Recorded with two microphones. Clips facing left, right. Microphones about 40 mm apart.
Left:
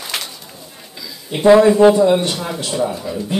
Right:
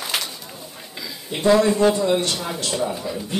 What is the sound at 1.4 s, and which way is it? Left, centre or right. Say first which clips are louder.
A man's voice: left 7 dB; centre.